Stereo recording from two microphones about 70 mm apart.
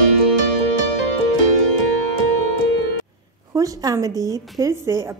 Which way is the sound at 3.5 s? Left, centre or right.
Right.